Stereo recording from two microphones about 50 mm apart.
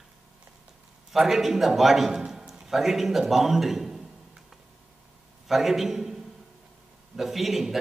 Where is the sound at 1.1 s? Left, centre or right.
Centre.